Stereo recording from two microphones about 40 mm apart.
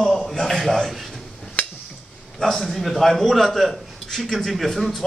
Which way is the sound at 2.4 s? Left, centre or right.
Centre.